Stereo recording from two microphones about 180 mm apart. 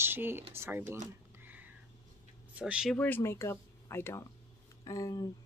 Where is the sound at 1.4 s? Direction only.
10° right (ahead or behind).